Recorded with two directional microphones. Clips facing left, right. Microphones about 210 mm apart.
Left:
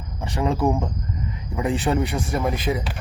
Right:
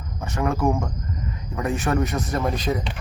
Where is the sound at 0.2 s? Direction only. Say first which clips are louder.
Left 1 dB; 15° left (ahead or behind).